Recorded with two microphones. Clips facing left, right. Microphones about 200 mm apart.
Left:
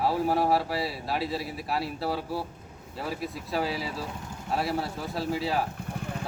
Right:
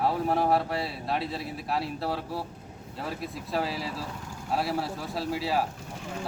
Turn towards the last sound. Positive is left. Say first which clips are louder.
# left 4 dB
turn(degrees=60)  # may be behind; listen again after turning